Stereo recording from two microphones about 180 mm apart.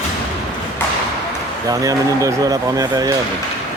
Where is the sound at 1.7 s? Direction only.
20° right (ahead or behind).